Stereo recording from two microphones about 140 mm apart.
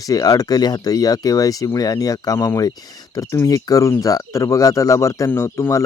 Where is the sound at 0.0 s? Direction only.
25° left (ahead or behind).